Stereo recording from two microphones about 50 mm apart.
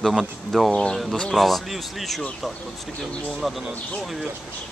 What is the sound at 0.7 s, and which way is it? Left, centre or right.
Speech, centre.